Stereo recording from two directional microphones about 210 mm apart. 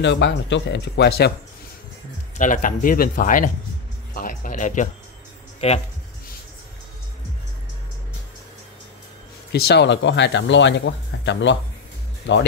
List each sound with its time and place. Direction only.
0.0 s speech: 55° left (ahead or behind)
2.3 s speech: 40° left (ahead or behind)
9.5 s speech: 50° left (ahead or behind)